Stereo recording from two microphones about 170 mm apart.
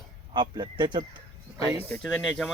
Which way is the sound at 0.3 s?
25° right (ahead or behind).